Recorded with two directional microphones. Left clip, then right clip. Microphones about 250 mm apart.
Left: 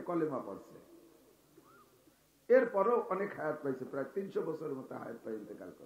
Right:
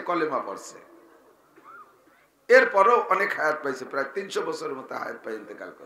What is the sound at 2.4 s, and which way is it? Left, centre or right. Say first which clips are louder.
Speech: right 11 dB; centre.